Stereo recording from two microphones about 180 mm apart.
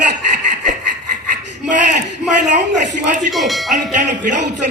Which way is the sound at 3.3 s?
Centre (ahead or behind).